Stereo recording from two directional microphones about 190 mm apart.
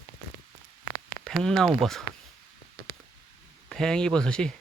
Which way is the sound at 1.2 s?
5° left (ahead or behind).